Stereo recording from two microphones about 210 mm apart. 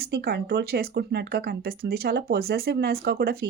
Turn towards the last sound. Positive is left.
turn(degrees=-50)  # may be behind; listen again after turning